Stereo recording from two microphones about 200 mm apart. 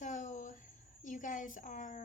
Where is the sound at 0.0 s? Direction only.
40° left (ahead or behind).